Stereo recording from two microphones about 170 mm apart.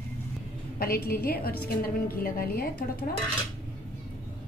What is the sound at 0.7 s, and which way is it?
A woman's voice, 60° left (ahead or behind).